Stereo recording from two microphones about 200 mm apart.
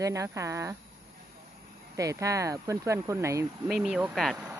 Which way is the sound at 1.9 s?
15° right (ahead or behind).